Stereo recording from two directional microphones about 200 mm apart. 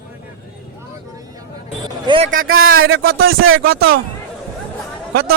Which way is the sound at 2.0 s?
25° right (ahead or behind).